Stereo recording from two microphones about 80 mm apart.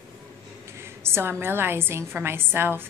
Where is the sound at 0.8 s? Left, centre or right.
Right.